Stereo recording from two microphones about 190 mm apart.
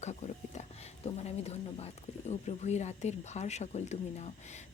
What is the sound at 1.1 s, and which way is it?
Speech, 35° left (ahead or behind).